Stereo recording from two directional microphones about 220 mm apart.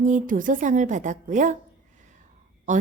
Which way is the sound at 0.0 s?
35° right (ahead or behind).